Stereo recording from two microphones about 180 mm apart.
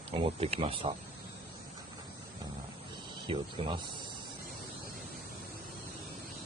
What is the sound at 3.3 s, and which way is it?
Speech, 30° right (ahead or behind).